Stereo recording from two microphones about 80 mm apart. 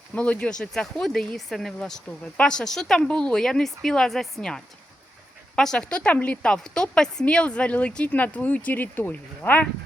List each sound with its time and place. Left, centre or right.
0.1 s speech: centre